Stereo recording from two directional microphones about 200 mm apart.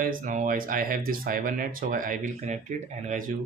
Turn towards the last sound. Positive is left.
turn(degrees=-40)  # may be behind; listen again after turning